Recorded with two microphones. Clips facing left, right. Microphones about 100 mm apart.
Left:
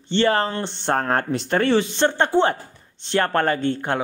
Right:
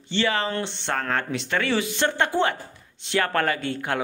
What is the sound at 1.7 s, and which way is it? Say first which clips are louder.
Speech: left 5 dB; 30° left (ahead or behind).